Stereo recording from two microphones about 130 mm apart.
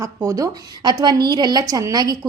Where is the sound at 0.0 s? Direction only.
25° right (ahead or behind).